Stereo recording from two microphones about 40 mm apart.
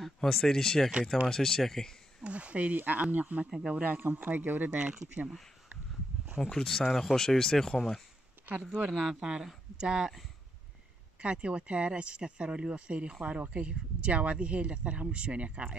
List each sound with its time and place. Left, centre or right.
0.0 s speech: centre
2.2 s a woman's voice: right
3.4 s speech: centre
4.0 s speech: right
4.7 s speech: right
6.5 s speech: centre
9.0 s speech: right
11.1 s a woman's voice: right